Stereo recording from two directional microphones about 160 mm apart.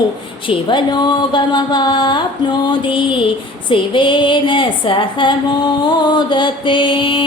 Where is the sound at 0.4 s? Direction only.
30° left (ahead or behind).